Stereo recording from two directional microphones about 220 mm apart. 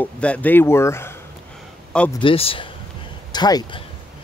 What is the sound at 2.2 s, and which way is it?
Speech, 25° left (ahead or behind).